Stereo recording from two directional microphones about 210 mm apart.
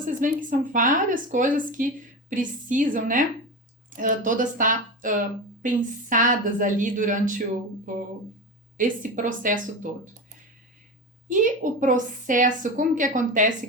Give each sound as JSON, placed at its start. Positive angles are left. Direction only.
{"t": 0.2, "sound": "a woman's voice", "side_deg": -40}
{"t": 11.3, "sound": "a woman's voice", "side_deg": -40}